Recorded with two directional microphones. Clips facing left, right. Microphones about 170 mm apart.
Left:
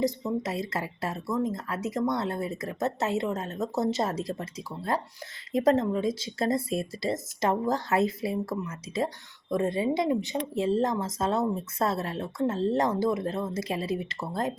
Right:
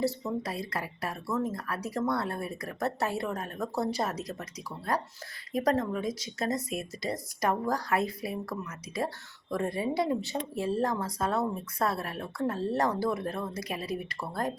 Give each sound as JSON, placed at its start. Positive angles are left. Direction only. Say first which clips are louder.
{"t": 0.0, "sound": "speech", "louder": "left 3 dB", "side_deg": 15}